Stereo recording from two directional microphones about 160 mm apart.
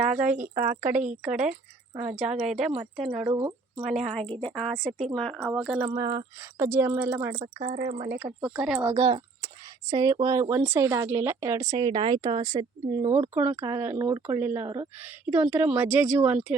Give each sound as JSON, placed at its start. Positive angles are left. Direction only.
{"t": 0.5, "sound": "speech", "side_deg": -55}
{"t": 0.8, "sound": "speech", "side_deg": -15}
{"t": 3.3, "sound": "speech", "side_deg": -30}
{"t": 3.8, "sound": "speech", "side_deg": 0}
{"t": 5.8, "sound": "speech", "side_deg": -25}
{"t": 7.6, "sound": "speech", "side_deg": -55}
{"t": 8.2, "sound": "speech", "side_deg": -5}
{"t": 9.0, "sound": "speech", "side_deg": -35}
{"t": 13.9, "sound": "speech", "side_deg": -30}
{"t": 14.3, "sound": "speech", "side_deg": -15}